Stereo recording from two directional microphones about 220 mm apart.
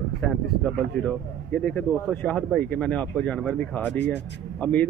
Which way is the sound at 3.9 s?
50° left (ahead or behind).